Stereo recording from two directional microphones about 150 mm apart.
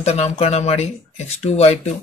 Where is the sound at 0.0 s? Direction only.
45° left (ahead or behind).